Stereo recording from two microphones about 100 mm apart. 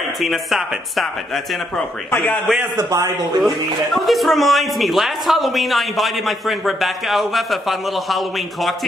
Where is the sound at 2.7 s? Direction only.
35° right (ahead or behind).